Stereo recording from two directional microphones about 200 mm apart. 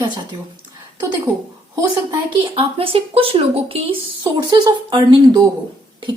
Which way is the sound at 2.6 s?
25° right (ahead or behind).